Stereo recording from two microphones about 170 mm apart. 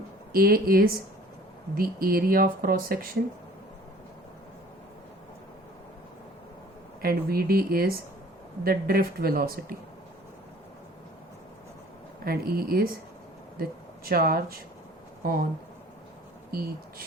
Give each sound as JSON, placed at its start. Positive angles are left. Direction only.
{"t": 0.3, "sound": "speech", "side_deg": -60}
{"t": 7.0, "sound": "speech", "side_deg": -60}
{"t": 12.2, "sound": "speech", "side_deg": -60}